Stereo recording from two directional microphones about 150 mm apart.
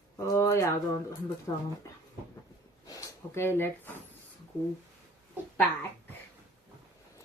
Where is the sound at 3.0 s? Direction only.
15° left (ahead or behind).